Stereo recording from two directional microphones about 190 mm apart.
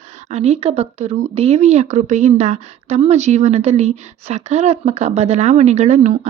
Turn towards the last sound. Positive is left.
turn(degrees=-40)  # may be behind; listen again after turning